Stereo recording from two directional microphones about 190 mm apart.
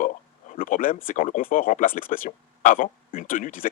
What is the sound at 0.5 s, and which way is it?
Speech, 45° left (ahead or behind).